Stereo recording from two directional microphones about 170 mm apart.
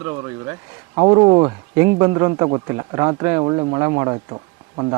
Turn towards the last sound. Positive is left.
turn(degrees=-30)  # may be behind; listen again after turning